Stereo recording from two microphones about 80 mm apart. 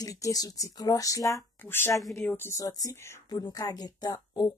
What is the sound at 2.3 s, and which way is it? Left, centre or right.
Speech, left.